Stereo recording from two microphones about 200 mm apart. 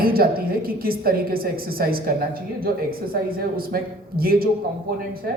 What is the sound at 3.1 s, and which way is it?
Speech, 50° right (ahead or behind).